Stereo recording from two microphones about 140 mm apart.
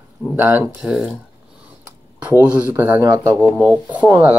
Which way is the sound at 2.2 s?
10° right (ahead or behind).